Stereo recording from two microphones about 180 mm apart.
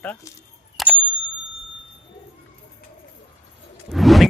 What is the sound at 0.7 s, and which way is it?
Bicycle bell, 5° right (ahead or behind).